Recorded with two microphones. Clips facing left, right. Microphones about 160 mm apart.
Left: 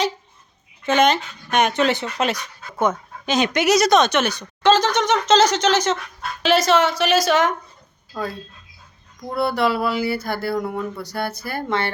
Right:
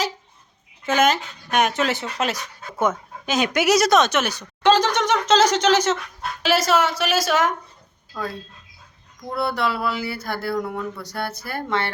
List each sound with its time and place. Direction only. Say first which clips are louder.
0.9 s speech: left 2 dB; 5° right (ahead or behind)
8.1 s speech: left 2 dB; 20° left (ahead or behind)
9.3 s speech: left 3 dB; centre (ahead or behind)